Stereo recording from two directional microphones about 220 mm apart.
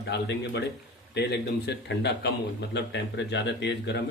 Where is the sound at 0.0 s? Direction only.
50° left (ahead or behind).